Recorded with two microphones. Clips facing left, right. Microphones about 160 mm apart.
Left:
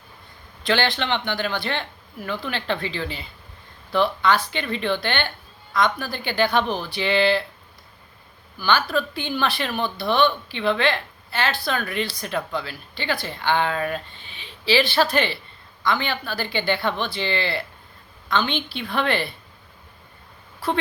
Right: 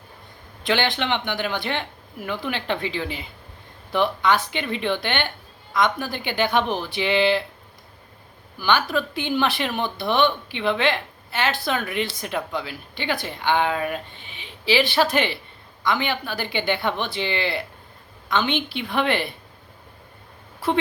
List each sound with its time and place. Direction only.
0.6 s speech: 15° right (ahead or behind)
8.5 s speech: 15° right (ahead or behind)
20.6 s a woman's voice: 20° right (ahead or behind)